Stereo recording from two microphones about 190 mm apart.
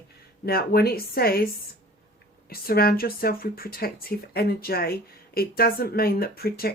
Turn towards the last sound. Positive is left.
turn(degrees=55)  # may be behind; listen again after turning